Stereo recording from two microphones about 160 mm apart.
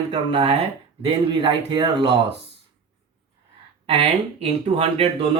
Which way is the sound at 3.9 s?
40° right (ahead or behind).